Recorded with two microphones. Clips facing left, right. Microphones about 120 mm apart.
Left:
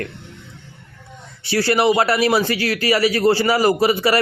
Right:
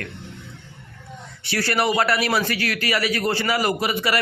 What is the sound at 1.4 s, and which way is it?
A man's voice, 30° left (ahead or behind).